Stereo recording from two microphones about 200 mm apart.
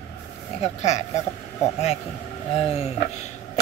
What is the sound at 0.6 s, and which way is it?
Speech, 35° left (ahead or behind).